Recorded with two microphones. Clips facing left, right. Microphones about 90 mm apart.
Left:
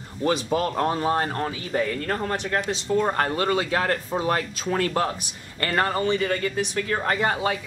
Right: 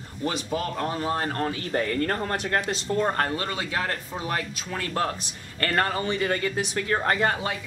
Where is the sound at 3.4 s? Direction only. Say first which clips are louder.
Left 6 dB; 30° left (ahead or behind).